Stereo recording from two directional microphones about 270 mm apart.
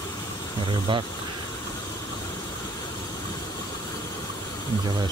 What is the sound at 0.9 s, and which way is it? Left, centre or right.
Speech, centre.